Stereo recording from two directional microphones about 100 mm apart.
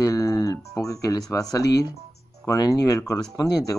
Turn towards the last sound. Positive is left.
turn(degrees=40)  # may be behind; listen again after turning